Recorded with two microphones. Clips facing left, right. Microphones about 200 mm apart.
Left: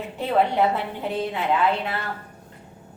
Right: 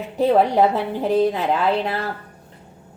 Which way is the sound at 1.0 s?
40° right (ahead or behind).